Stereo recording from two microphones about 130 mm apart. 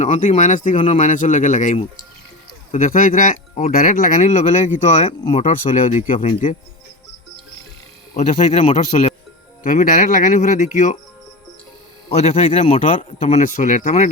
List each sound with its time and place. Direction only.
0.0 s speech: 70° left (ahead or behind)
2.7 s speech: 85° left; by 5.1 s 65° left (ahead or behind)
5.3 s speech: 55° left (ahead or behind)
6.1 s speech: 85° left
8.1 s speech: 60° left (ahead or behind)
9.6 s speech: 90° left; by 10.9 s 75° left (ahead or behind)
12.0 s speech: 50° left (ahead or behind)
13.4 s speech: 70° left (ahead or behind)